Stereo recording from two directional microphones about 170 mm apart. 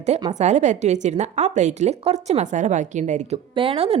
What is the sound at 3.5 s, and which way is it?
Speech, 35° right (ahead or behind).